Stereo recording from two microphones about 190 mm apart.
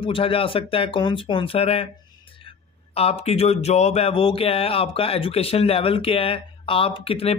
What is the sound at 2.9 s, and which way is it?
Speech, 30° left (ahead or behind).